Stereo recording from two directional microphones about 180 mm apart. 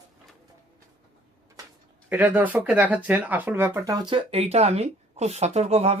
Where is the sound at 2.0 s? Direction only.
10° right (ahead or behind).